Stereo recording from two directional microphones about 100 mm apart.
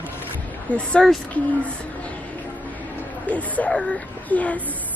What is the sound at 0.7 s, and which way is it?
Speech, 5° left (ahead or behind).